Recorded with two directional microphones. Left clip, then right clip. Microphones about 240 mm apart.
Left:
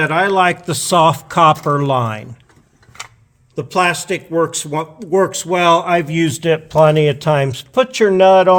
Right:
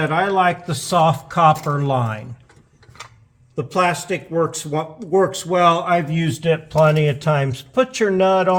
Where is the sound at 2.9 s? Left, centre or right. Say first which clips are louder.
Left 6 dB; left.